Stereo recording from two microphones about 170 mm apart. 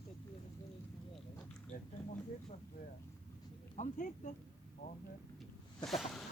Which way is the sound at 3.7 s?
45° left (ahead or behind).